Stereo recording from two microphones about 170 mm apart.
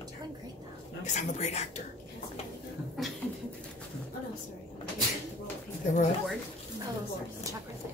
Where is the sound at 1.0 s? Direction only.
45° left (ahead or behind).